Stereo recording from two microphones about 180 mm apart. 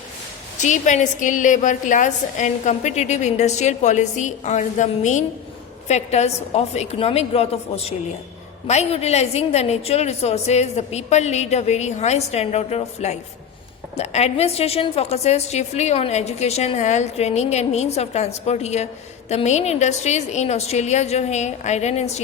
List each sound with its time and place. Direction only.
0.6 s a woman's voice: 40° left (ahead or behind)